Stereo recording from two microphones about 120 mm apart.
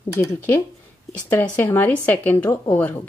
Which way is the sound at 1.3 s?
15° left (ahead or behind).